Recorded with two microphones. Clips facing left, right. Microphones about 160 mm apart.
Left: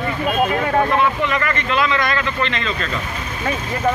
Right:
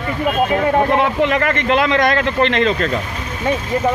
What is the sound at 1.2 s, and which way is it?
Speech, 65° right (ahead or behind).